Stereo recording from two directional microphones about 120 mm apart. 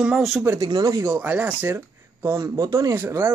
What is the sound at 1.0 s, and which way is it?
Speech, 15° right (ahead or behind).